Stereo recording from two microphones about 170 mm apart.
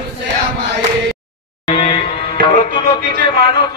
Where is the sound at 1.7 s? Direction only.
30° left (ahead or behind).